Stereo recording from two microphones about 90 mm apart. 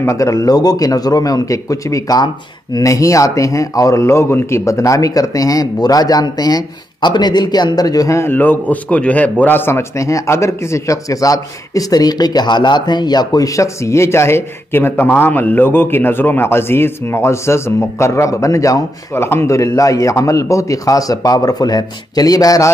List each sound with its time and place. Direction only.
0.0 s a man's voice: 35° left (ahead or behind)
8.2 s a man's voice: 20° left (ahead or behind); by 22.7 s 40° left (ahead or behind)